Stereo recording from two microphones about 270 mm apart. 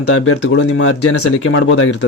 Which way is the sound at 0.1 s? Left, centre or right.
Left.